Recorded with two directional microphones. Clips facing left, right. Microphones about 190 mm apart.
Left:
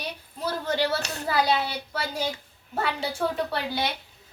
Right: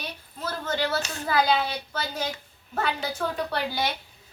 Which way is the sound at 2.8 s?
30° left (ahead or behind).